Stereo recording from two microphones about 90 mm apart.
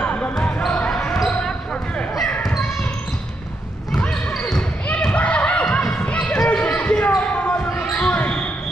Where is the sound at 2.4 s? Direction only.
Centre (ahead or behind).